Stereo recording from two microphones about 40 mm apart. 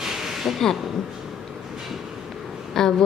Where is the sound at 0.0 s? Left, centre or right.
Centre.